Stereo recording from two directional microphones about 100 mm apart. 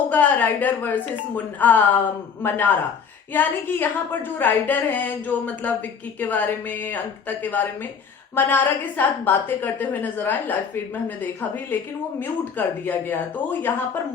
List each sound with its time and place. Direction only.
0.1 s a woman's voice: 15° left (ahead or behind)